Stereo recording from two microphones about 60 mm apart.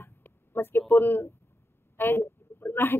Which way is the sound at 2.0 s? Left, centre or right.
Left.